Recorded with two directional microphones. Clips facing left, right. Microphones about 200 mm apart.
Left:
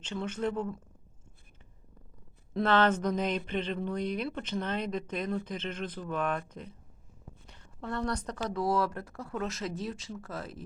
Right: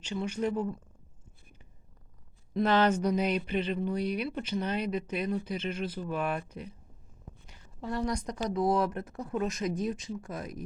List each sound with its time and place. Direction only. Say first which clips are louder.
0.0 s speech: right 1 dB; 10° right (ahead or behind)
2.6 s speech: right 1 dB; 10° right (ahead or behind)